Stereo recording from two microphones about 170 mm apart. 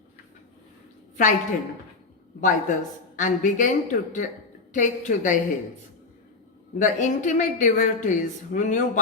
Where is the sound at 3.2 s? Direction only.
50° left (ahead or behind).